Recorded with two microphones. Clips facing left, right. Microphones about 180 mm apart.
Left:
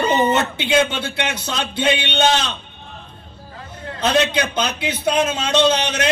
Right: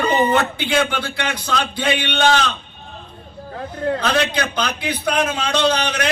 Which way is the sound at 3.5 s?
60° right (ahead or behind).